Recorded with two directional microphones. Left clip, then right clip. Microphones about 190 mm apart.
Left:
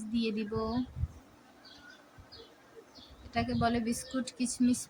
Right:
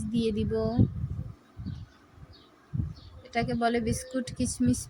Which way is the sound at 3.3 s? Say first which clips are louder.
Right 4 dB; 15° right (ahead or behind).